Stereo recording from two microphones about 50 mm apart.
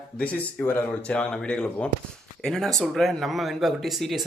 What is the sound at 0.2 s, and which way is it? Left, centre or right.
Speech, left.